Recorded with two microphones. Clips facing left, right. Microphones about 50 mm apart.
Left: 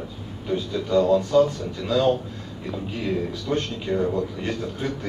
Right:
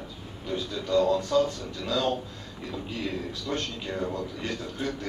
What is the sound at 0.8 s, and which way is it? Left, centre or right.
A man's voice, left.